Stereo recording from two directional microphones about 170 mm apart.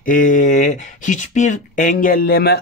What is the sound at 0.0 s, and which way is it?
Speech, 50° left (ahead or behind).